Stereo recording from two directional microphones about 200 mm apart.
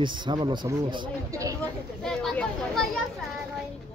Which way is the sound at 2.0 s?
5° left (ahead or behind).